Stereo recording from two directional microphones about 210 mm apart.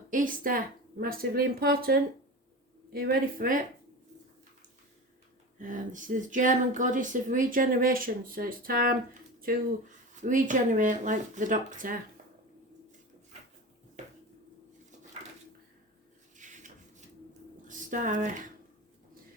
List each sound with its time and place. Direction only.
0.1 s a woman's voice: 40° right (ahead or behind)
5.5 s speech: 40° right (ahead or behind)
10.2 s speech: 40° right (ahead or behind)
16.4 s a sound: 35° right (ahead or behind)
17.7 s speech: 40° right (ahead or behind)